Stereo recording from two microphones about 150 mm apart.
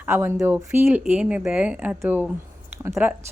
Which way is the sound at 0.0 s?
15° right (ahead or behind).